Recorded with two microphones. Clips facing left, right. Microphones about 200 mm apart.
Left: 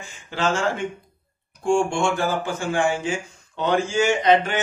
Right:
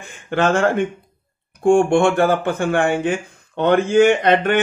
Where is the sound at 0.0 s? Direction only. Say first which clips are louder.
Right 6 dB; 60° right (ahead or behind).